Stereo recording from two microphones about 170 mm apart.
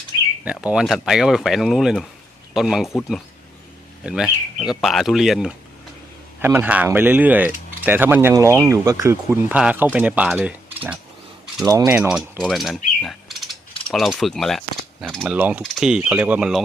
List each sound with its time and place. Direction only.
0.4 s speech: 5° right (ahead or behind)
4.0 s speech: 5° right (ahead or behind)
11.6 s mechanisms: 20° right (ahead or behind)
11.9 s speech: 5° right (ahead or behind)
12.4 s mechanisms: centre (ahead or behind)
15.1 s speech: centre (ahead or behind)
15.4 s speech: 10° right (ahead or behind)